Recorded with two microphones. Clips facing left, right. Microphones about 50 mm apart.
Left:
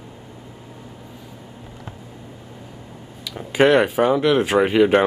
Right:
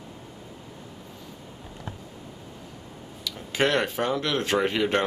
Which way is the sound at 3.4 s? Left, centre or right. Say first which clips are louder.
Left 9 dB; centre.